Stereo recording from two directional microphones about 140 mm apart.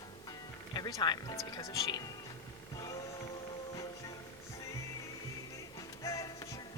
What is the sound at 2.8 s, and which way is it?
Music, 25° left (ahead or behind).